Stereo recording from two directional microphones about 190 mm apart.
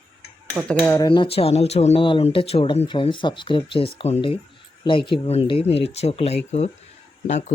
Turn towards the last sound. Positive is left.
turn(degrees=35)  # may be behind; listen again after turning